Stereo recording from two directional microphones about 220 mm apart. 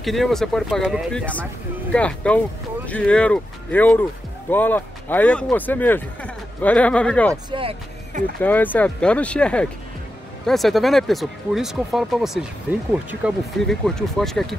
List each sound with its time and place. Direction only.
0.0 s speech: centre (ahead or behind)
7.5 s speech: 25° right (ahead or behind)
8.4 s speech: 10° left (ahead or behind)